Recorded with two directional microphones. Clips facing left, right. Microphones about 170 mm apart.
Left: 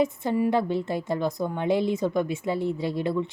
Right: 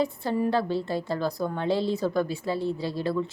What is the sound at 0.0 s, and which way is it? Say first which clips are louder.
A woman's voice: left 2 dB; 20° left (ahead or behind).